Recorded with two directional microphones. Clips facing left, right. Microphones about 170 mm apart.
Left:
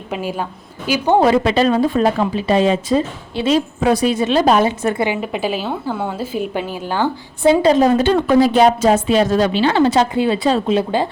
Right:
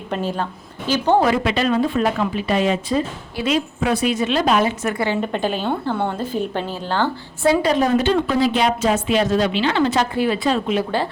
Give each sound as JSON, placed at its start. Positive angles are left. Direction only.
{"t": 0.1, "sound": "a woman's voice", "side_deg": 10}
{"t": 1.2, "sound": "a woman's voice", "side_deg": 30}
{"t": 5.0, "sound": "a woman's voice", "side_deg": 10}
{"t": 8.0, "sound": "a woman's voice", "side_deg": 50}